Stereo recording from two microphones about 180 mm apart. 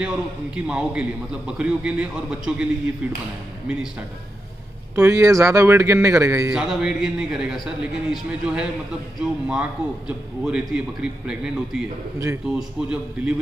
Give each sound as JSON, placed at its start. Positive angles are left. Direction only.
{"t": 0.0, "sound": "a man's voice", "side_deg": -5}
{"t": 4.9, "sound": "speech", "side_deg": -15}
{"t": 6.5, "sound": "a man's voice", "side_deg": -5}